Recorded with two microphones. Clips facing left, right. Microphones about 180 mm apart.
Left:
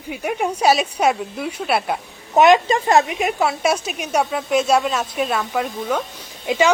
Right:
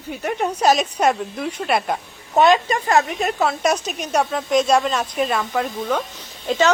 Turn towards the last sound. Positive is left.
turn(degrees=10)  # may be behind; listen again after turning